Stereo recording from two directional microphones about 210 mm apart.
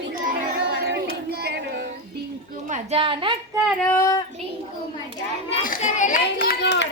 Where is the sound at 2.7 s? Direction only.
30° right (ahead or behind).